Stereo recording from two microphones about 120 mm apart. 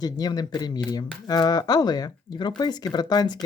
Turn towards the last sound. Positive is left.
turn(degrees=35)  # may be behind; listen again after turning